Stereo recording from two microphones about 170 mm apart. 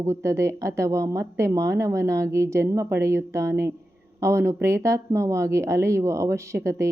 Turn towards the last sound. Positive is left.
turn(degrees=-15)  # may be behind; listen again after turning